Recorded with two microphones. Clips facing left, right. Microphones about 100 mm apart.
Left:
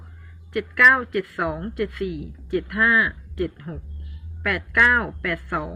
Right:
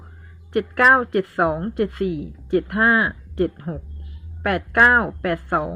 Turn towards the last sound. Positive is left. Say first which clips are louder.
# right 5 dB
turn(degrees=-30)  # may be behind; listen again after turning